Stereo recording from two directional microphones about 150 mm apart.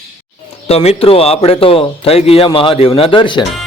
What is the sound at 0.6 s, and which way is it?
A man's voice, 45° left (ahead or behind).